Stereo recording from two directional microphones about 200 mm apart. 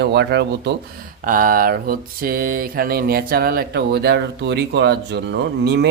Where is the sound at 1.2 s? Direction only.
45° right (ahead or behind).